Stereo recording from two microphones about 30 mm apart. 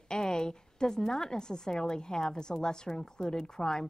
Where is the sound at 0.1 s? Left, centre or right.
Left.